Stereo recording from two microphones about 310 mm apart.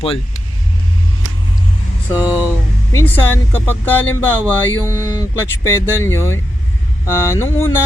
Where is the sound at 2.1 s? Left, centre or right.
Centre.